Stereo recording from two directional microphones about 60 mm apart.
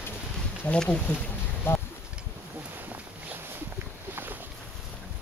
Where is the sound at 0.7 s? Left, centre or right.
Left.